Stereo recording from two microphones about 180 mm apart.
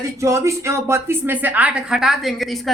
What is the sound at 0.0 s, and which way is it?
A woman's voice, 15° right (ahead or behind).